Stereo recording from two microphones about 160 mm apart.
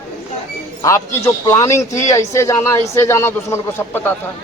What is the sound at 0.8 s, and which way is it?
A man's voice, 20° left (ahead or behind).